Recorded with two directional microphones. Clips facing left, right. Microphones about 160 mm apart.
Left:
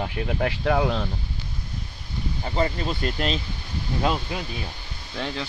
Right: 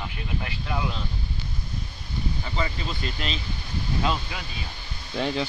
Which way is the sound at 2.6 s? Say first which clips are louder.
Left 8 dB; 45° left (ahead or behind).